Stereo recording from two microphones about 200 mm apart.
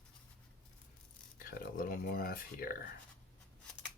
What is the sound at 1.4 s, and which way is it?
Speech, 45° left (ahead or behind).